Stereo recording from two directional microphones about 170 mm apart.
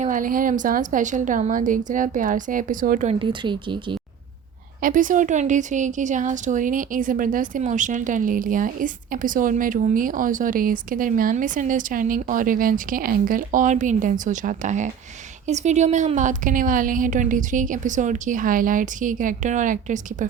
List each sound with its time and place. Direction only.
0.0 s a woman's voice: 50° right (ahead or behind)
3.1 s speech: 30° right (ahead or behind)
4.8 s a woman's voice: 50° right (ahead or behind)